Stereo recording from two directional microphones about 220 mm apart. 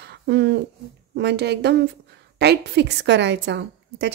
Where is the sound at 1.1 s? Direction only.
50° right (ahead or behind).